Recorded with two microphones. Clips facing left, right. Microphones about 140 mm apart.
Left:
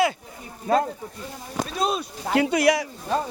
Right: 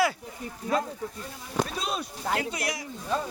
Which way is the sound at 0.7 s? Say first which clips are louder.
Left 6 dB; 60° left (ahead or behind).